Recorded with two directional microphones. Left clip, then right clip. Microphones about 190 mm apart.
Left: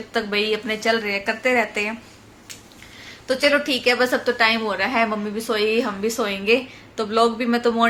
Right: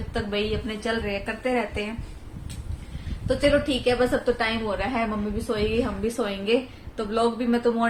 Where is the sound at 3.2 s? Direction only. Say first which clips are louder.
Left 3 dB; 20° left (ahead or behind).